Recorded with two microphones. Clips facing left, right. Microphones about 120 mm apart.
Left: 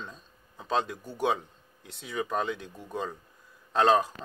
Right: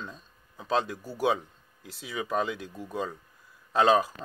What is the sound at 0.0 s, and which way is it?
Speech, centre (ahead or behind).